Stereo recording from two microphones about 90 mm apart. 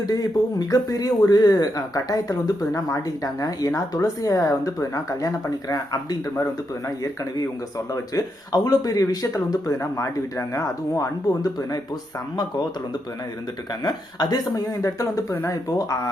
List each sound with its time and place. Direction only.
0.0 s speech: 45° left (ahead or behind)
13.8 s speech: 50° left (ahead or behind)